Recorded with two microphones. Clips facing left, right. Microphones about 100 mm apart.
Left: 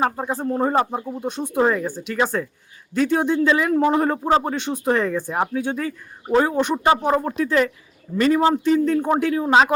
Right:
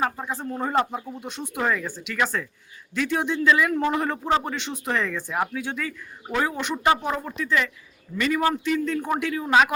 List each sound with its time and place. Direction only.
0.0 s speech: 40° left (ahead or behind)
1.2 s speech: 45° left (ahead or behind)
1.5 s speech: 35° left (ahead or behind)
3.4 s speech: 30° left (ahead or behind)
4.2 s speech: 35° left (ahead or behind)
6.8 s speech: 30° left (ahead or behind)
9.0 s speech: 25° left (ahead or behind)
9.2 s speech: 35° left (ahead or behind)